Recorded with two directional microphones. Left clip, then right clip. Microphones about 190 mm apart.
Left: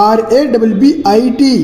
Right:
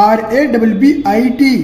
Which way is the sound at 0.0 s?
5° left (ahead or behind).